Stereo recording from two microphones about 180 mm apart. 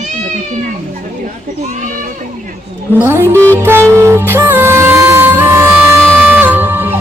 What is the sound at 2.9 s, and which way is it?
Music, 15° right (ahead or behind).